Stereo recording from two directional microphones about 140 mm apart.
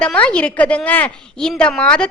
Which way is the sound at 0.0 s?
10° left (ahead or behind).